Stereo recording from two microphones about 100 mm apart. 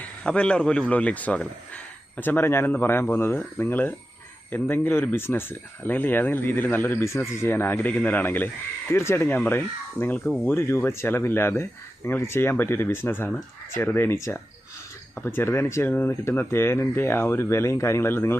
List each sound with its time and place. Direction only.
0.0 s speech: 10° left (ahead or behind)
10.4 s speech: 25° left (ahead or behind)